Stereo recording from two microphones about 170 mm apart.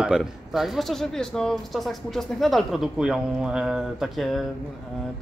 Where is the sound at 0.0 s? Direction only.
5° right (ahead or behind).